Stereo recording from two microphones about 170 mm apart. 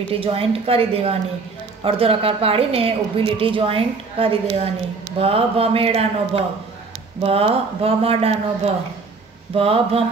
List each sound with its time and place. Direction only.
0.1 s a woman's voice: 35° right (ahead or behind)